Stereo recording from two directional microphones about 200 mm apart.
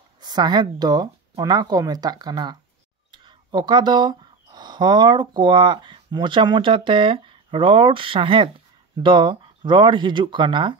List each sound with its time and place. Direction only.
0.2 s speech: 20° right (ahead or behind)